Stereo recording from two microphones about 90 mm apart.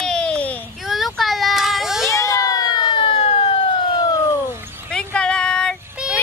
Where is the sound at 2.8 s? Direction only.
75° left (ahead or behind); by 4.1 s 55° left (ahead or behind).